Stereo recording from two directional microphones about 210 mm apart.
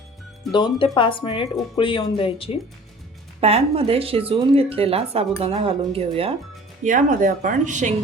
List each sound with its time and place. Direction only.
0.5 s a woman's voice: 25° left (ahead or behind)
3.4 s a woman's voice: 30° right (ahead or behind)
6.8 s speech: 40° right (ahead or behind)